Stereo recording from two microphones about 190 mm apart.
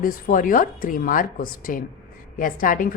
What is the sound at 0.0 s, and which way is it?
A woman's voice, 45° left (ahead or behind).